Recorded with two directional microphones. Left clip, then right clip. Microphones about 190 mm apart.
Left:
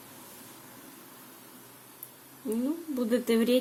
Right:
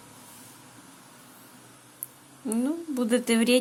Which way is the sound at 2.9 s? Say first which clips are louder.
Right 2 dB; 15° right (ahead or behind).